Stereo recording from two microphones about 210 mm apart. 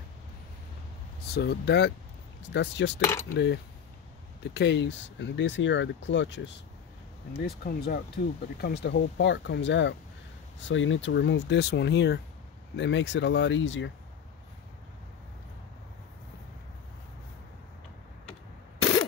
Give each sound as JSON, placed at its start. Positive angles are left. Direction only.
{"t": 1.3, "sound": "speech", "side_deg": 55}
{"t": 7.3, "sound": "speech", "side_deg": 50}